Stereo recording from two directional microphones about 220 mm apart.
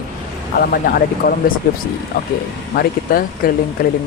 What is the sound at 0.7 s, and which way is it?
Speech, 40° left (ahead or behind).